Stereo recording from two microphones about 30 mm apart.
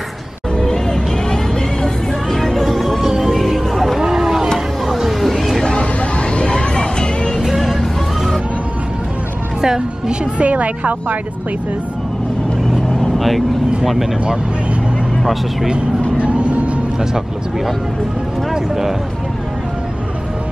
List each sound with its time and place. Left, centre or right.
0.6 s music: left
2.5 s music: centre
4.0 s a sound: centre
5.2 s music: centre
5.8 s a sound: left
6.4 s music: left
7.4 s music: centre
9.6 s a sound: right
10.4 s speech: right
16.2 s vehicle: right
18.5 s speech: centre